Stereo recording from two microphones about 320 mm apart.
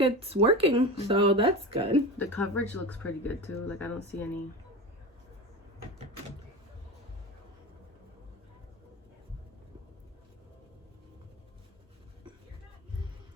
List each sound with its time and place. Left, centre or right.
0.0 s speech: centre
2.1 s speech: centre